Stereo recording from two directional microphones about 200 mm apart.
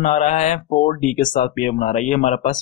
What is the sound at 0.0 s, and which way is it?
Speech, 40° left (ahead or behind).